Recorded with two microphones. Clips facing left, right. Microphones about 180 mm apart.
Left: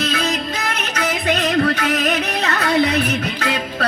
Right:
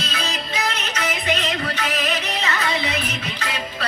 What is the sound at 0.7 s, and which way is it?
Music, 60° left (ahead or behind).